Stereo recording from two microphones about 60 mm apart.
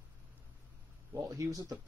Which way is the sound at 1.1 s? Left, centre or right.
Right.